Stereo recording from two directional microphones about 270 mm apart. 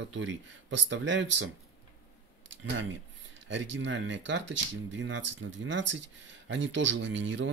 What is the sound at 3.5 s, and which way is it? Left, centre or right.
Speech, right.